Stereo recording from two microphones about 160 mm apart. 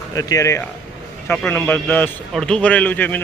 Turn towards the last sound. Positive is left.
turn(degrees=10)  # may be behind; listen again after turning